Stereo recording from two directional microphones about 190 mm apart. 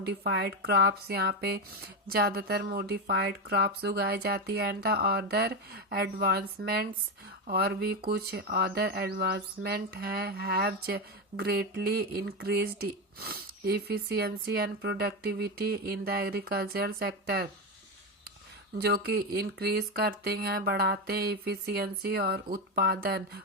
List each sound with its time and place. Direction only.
0.0 s speech: 65° right (ahead or behind)
18.8 s speech: 55° right (ahead or behind)